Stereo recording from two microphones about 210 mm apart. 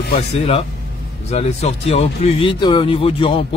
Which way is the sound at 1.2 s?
30° left (ahead or behind).